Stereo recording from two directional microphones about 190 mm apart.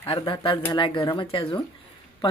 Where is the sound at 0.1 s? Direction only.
25° left (ahead or behind).